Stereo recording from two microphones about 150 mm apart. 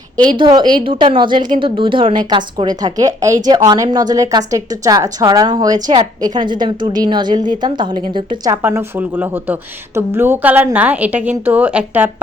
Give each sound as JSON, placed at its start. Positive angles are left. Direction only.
{"t": 0.3, "sound": "a woman's voice", "side_deg": -30}
{"t": 8.4, "sound": "a woman's voice", "side_deg": -15}